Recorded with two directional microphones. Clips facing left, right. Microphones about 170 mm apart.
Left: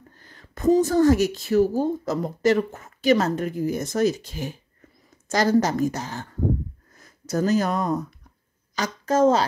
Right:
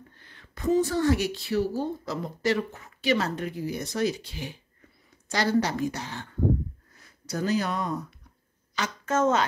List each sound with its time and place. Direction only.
0.1 s a woman's voice: 40° left (ahead or behind)